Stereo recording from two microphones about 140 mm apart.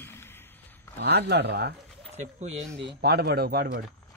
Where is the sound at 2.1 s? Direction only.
55° right (ahead or behind).